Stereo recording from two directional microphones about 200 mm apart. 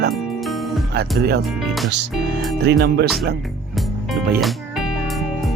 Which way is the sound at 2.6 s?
55° right (ahead or behind).